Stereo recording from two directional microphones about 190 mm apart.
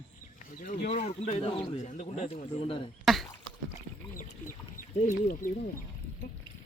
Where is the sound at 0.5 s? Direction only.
40° left (ahead or behind); by 1.8 s 25° left (ahead or behind).